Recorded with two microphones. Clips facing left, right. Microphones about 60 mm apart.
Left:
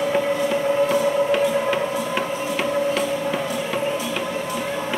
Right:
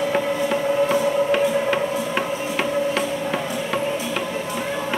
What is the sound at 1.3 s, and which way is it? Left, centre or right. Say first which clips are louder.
Music: even; right.